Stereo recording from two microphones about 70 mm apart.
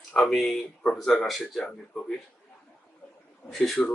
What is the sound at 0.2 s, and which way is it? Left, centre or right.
Speech, centre.